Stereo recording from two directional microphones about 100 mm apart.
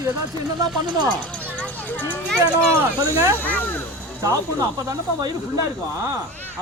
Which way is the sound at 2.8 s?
25° right (ahead or behind).